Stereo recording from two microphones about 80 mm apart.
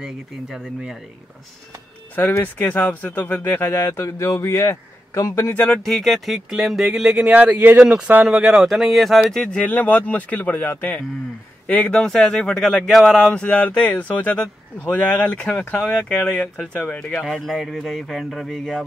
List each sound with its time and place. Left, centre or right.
0.0 s speech: centre
2.4 s speech: left
5.5 s speech: centre
5.8 s speech: centre
8.3 s speech: centre
13.3 s speech: centre